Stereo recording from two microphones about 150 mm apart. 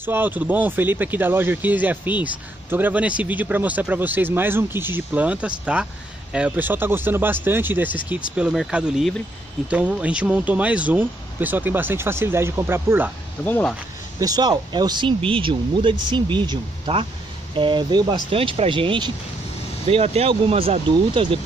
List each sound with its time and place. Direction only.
0.0 s speech: 15° right (ahead or behind)
13.4 s speech: 10° left (ahead or behind)
14.2 s speech: 25° right (ahead or behind)